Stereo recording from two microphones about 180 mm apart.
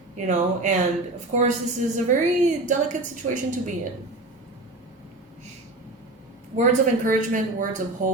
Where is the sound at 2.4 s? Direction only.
45° right (ahead or behind).